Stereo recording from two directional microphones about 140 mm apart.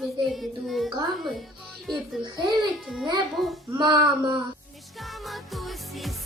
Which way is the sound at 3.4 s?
Centre (ahead or behind).